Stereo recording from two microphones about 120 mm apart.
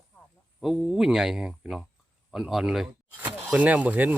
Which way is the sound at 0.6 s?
5° right (ahead or behind).